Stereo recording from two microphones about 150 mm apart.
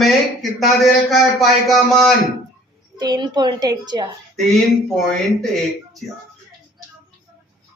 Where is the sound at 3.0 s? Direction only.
30° right (ahead or behind).